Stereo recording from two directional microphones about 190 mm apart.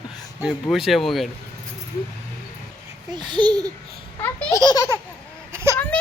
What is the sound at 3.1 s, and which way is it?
Speech, 25° right (ahead or behind).